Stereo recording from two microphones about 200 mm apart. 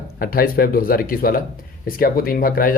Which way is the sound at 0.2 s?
45° left (ahead or behind).